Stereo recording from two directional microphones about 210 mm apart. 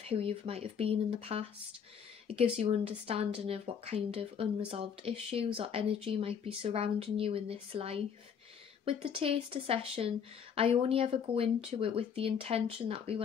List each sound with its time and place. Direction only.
0.0 s speech: 25° right (ahead or behind)